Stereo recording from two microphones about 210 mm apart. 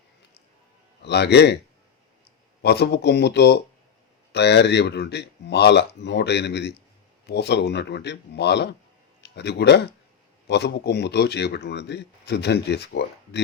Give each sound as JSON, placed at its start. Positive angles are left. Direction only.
{"t": 1.0, "sound": "speech", "side_deg": 55}
{"t": 2.6, "sound": "speech", "side_deg": 50}